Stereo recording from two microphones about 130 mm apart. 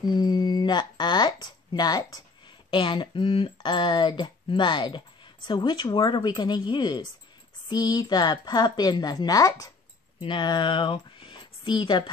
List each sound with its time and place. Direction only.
0.0 s speech: 30° left (ahead or behind)